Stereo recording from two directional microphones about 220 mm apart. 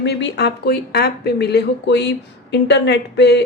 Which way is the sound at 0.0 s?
50° left (ahead or behind).